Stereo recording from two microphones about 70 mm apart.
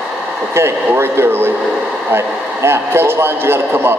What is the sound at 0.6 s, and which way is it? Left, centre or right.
A man's voice, right.